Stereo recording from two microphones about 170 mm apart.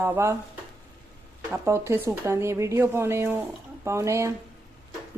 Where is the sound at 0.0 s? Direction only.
15° right (ahead or behind).